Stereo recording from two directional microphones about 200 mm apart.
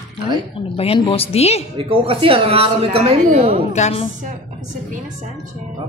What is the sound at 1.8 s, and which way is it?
Speech, 25° right (ahead or behind).